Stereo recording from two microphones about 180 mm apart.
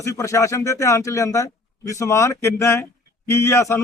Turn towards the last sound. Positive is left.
turn(degrees=15)  # may be behind; listen again after turning